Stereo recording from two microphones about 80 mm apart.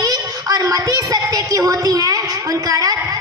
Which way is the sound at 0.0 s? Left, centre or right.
Right.